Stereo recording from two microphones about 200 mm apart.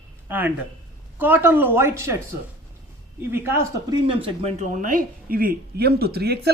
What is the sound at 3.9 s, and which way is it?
Speech, 25° right (ahead or behind).